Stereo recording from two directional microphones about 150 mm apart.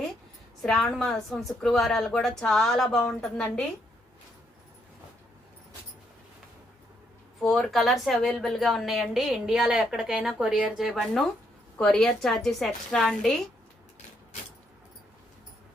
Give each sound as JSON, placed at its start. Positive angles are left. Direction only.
{"t": 0.6, "sound": "a woman's voice", "side_deg": 5}
{"t": 7.4, "sound": "a woman's voice", "side_deg": 0}